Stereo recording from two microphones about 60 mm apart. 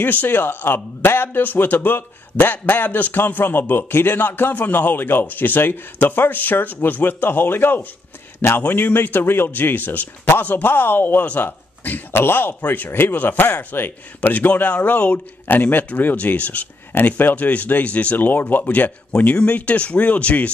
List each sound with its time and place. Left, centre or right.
0.0 s speech: left
19.1 s speech: left